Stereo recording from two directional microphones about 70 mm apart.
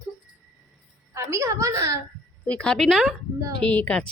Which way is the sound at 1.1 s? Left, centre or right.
Right.